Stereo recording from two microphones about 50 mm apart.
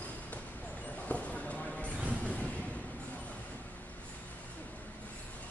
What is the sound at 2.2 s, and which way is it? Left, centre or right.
Vehicle, left.